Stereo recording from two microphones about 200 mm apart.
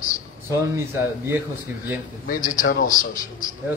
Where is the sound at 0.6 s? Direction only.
15° right (ahead or behind).